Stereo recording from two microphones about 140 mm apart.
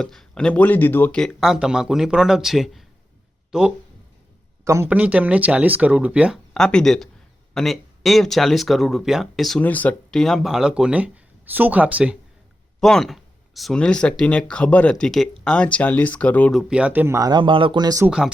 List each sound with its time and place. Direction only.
0.0 s speech: 5° left (ahead or behind)
1.2 s speech: centre (ahead or behind)
4.6 s a man's voice: 20° right (ahead or behind)
4.9 s speech: 10° right (ahead or behind)
6.5 s speech: 5° left (ahead or behind)
9.6 s speech: 10° left (ahead or behind); by 12.1 s 10° right (ahead or behind)
12.8 s speech: centre (ahead or behind)
16.5 s speech: 5° right (ahead or behind); by 18.0 s 30° right (ahead or behind)
18.0 s speech: 5° right (ahead or behind)